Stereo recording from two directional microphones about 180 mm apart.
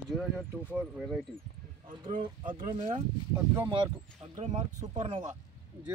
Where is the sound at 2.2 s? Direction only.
30° right (ahead or behind).